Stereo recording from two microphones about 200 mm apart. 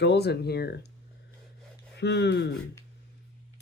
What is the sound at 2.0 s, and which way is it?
Speech, 55° left (ahead or behind).